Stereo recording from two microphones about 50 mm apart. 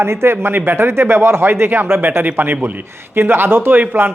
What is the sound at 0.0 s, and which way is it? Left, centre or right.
A man's voice, right.